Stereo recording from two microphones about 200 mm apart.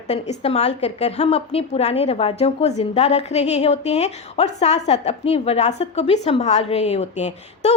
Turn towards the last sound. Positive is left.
turn(degrees=35)  # may be behind; listen again after turning